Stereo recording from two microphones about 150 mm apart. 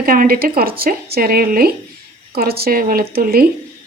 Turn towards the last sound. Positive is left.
turn(degrees=-85)